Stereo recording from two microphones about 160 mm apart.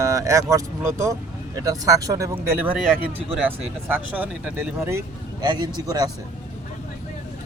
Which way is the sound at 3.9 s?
10° right (ahead or behind).